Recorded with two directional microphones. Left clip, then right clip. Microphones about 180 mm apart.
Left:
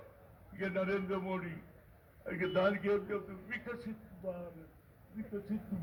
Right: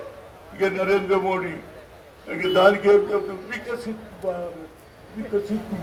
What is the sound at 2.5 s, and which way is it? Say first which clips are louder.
Speech: right 17 dB; 20° left (ahead or behind).